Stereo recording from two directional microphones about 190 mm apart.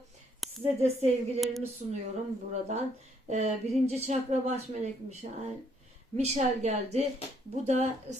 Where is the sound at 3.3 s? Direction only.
35° right (ahead or behind).